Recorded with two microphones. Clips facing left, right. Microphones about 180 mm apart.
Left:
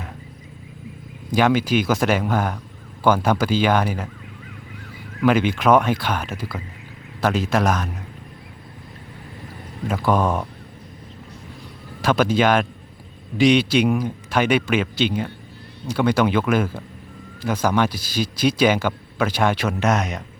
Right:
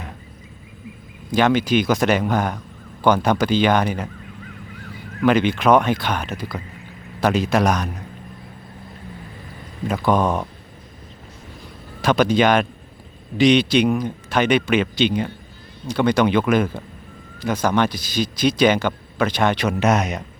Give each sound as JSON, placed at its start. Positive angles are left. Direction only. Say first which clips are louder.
{"t": 1.4, "sound": "speech", "louder": "right 1 dB", "side_deg": 5}
{"t": 5.2, "sound": "speech", "louder": "right 1 dB", "side_deg": 5}
{"t": 9.8, "sound": "speech", "louder": "right 1 dB", "side_deg": 5}
{"t": 12.0, "sound": "speech", "louder": "right 1 dB", "side_deg": 5}